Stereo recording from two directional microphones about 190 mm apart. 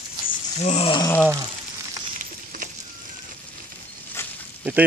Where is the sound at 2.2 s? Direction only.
45° right (ahead or behind).